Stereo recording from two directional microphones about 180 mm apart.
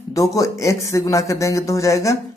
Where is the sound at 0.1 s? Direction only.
20° left (ahead or behind).